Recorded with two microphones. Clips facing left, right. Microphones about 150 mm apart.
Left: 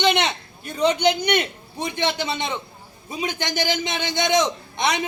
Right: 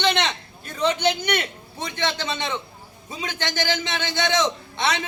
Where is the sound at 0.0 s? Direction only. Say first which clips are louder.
Left 2 dB; 15° left (ahead or behind).